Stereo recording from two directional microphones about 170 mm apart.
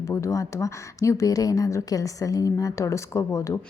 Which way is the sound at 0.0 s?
15° left (ahead or behind).